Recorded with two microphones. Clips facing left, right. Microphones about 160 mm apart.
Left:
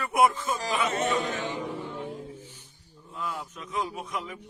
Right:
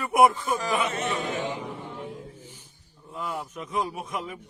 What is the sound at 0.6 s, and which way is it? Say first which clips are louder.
Speech: left 3 dB; 40° left (ahead or behind).